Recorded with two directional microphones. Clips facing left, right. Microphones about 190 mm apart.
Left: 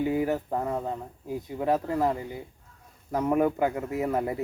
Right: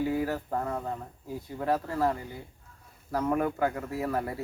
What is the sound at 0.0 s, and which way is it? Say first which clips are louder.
Speech: left 3 dB; 20° left (ahead or behind).